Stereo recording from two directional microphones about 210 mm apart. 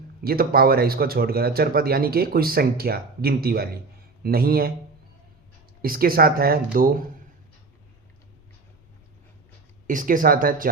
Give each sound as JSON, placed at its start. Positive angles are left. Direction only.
{"t": 0.2, "sound": "speech", "side_deg": -45}
{"t": 5.8, "sound": "speech", "side_deg": -45}
{"t": 9.8, "sound": "speech", "side_deg": -40}